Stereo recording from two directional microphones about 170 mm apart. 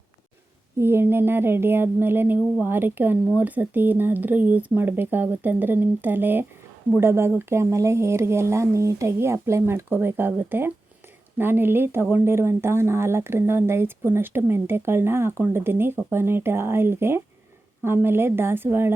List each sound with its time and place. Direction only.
0.8 s speech: 15° right (ahead or behind)